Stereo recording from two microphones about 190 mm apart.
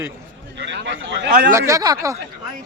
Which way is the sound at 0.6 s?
70° right (ahead or behind).